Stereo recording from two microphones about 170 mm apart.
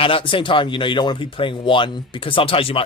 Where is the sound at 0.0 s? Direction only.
30° left (ahead or behind).